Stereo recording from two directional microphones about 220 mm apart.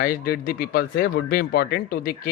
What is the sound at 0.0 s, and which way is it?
Speech, 45° left (ahead or behind).